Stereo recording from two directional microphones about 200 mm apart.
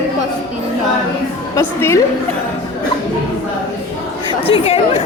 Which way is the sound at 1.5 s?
15° left (ahead or behind).